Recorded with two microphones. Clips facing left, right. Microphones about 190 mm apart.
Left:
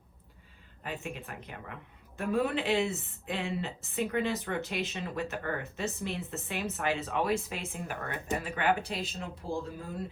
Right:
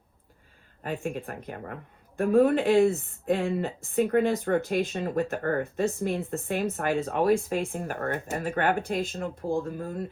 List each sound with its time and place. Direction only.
1.0 s speech: 50° right (ahead or behind)